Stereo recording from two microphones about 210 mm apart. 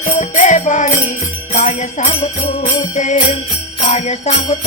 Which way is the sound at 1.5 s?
30° left (ahead or behind).